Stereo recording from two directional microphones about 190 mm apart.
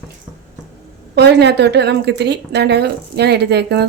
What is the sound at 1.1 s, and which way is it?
Speech, 65° right (ahead or behind).